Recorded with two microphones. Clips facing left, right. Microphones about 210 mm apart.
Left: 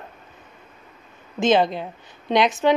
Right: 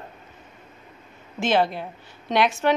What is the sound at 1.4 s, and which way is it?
A woman's voice, 20° left (ahead or behind).